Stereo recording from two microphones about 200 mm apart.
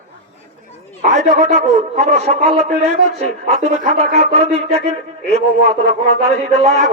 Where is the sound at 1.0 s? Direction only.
35° right (ahead or behind).